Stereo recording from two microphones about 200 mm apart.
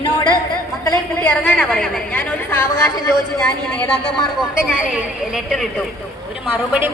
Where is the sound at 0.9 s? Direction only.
5° left (ahead or behind).